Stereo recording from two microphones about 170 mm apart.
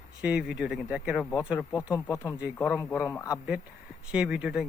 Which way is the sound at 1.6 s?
10° left (ahead or behind).